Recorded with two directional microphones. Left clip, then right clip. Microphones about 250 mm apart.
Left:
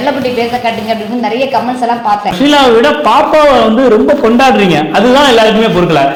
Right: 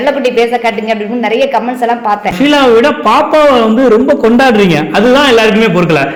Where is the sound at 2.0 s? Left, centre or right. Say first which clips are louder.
Left 3 dB; right.